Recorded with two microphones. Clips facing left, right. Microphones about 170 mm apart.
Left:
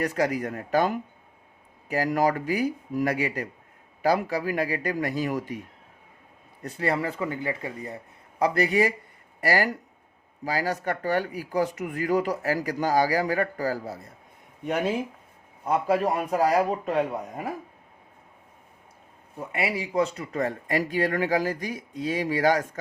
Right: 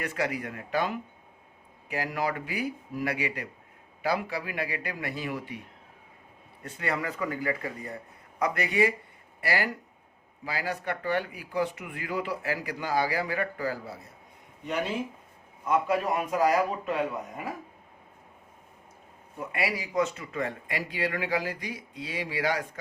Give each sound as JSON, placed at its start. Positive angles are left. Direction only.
{"t": 0.0, "sound": "speech", "side_deg": 40}
{"t": 6.6, "sound": "speech", "side_deg": 35}
{"t": 15.6, "sound": "speech", "side_deg": 35}
{"t": 19.4, "sound": "speech", "side_deg": 25}